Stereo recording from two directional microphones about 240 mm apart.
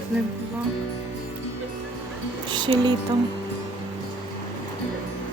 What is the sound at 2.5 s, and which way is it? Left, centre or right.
Music, centre.